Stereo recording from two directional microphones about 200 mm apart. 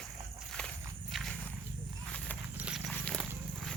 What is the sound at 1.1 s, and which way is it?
Walk, centre (ahead or behind).